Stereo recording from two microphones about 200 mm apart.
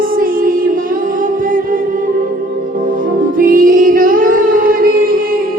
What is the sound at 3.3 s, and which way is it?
Music, 45° right (ahead or behind).